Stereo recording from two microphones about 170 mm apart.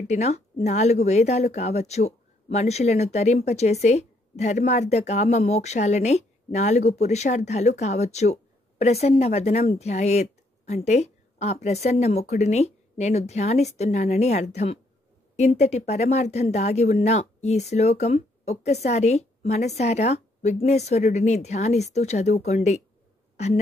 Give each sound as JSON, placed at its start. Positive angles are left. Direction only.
{"t": 0.0, "sound": "speech", "side_deg": 40}